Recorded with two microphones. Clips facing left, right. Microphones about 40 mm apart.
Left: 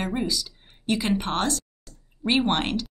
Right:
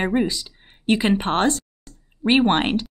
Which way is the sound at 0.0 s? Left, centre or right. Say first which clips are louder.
Right 6 dB; right.